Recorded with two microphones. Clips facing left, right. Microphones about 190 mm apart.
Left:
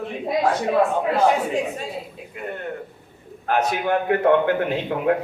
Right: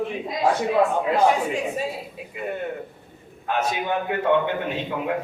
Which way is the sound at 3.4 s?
65° left (ahead or behind).